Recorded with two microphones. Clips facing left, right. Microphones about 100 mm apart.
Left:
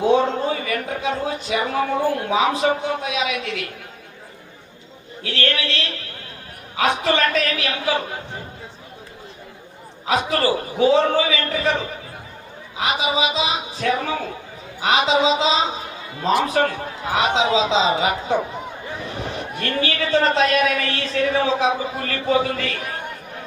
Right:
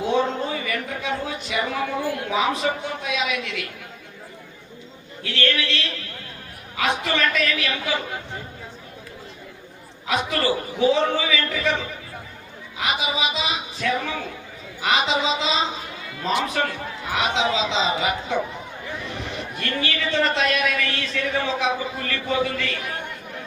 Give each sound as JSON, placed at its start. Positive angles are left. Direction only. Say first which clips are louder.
{"t": 0.1, "sound": "a man's voice", "louder": "left 2 dB", "side_deg": 40}
{"t": 5.2, "sound": "a man's voice", "louder": "left 1 dB", "side_deg": 40}
{"t": 10.1, "sound": "a man's voice", "louder": "left 3 dB", "side_deg": 40}
{"t": 13.3, "sound": "a man's voice", "louder": "left 4 dB", "side_deg": 35}